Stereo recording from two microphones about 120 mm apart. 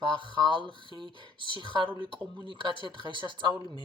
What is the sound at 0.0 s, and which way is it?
Speech, 45° right (ahead or behind).